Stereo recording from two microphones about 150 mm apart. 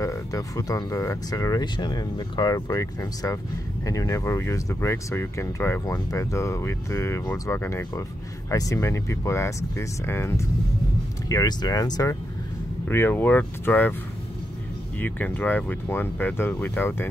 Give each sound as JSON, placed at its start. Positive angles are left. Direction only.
{"t": 0.0, "sound": "speech", "side_deg": 20}
{"t": 15.0, "sound": "speech", "side_deg": 10}